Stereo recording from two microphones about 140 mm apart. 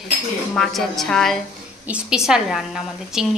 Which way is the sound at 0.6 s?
Centre (ahead or behind).